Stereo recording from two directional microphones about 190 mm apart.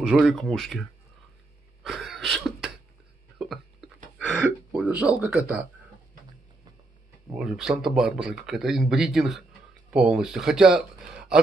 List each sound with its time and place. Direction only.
0.0 s speech: centre (ahead or behind)
1.8 s cough: centre (ahead or behind)
4.2 s speech: 5° right (ahead or behind)
7.3 s speech: centre (ahead or behind)